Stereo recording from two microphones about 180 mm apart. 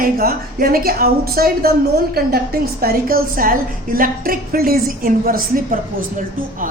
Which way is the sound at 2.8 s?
55° right (ahead or behind).